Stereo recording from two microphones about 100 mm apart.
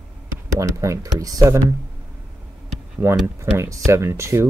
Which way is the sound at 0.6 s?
30° right (ahead or behind).